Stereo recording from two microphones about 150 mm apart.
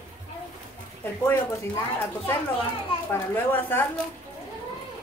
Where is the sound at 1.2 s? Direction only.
15° left (ahead or behind).